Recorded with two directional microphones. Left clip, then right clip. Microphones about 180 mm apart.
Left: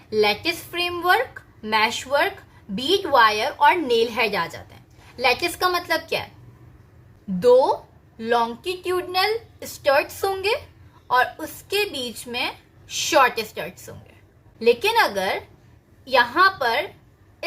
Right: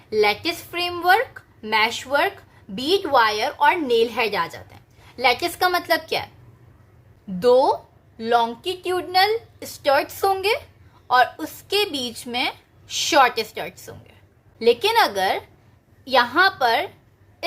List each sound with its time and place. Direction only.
0.1 s a woman's voice: 20° right (ahead or behind)
7.3 s speech: 25° right (ahead or behind)